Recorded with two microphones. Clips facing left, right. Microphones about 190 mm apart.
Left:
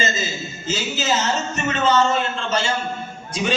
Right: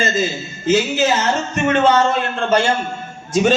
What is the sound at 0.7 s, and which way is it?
Speech, 60° right (ahead or behind).